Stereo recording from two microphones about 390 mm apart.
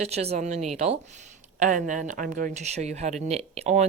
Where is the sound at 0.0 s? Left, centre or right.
Centre.